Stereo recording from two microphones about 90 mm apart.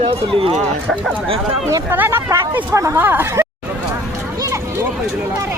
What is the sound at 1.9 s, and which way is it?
Speech, 25° right (ahead or behind).